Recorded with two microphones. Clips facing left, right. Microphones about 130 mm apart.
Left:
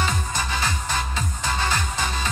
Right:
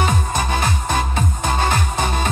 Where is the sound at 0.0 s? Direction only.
50° right (ahead or behind).